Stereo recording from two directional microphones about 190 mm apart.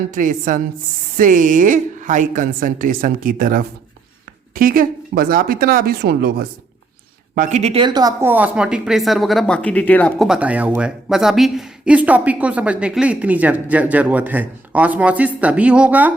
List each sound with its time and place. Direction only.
0.1 s a woman's voice: 45° right (ahead or behind)
7.3 s a woman's voice: 35° right (ahead or behind); by 10.2 s 10° left (ahead or behind)
10.2 s speech: 5° right (ahead or behind)